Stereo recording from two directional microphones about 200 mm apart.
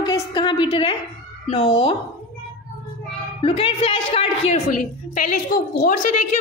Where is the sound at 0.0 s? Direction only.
15° left (ahead or behind).